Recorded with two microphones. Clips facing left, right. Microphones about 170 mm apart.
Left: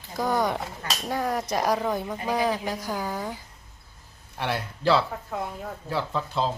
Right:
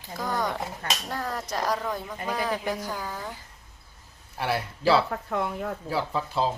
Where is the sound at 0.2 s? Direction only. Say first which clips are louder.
Left 4 dB; 10° left (ahead or behind).